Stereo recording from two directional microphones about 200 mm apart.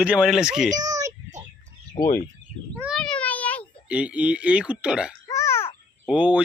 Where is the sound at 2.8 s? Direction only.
Centre (ahead or behind).